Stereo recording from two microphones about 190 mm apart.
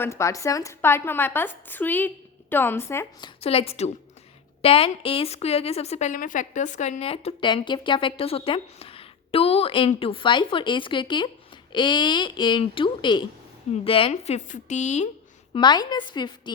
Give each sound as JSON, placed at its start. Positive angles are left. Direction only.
{"t": 0.0, "sound": "a woman's voice", "side_deg": 15}
{"t": 15.5, "sound": "a woman's voice", "side_deg": 25}